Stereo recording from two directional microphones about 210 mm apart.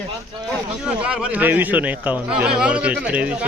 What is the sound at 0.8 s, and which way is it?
Speech, 5° right (ahead or behind).